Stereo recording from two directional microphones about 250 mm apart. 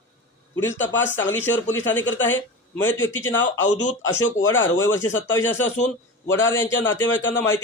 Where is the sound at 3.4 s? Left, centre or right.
Left.